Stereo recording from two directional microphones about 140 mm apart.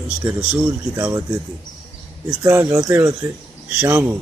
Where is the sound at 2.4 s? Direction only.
15° right (ahead or behind).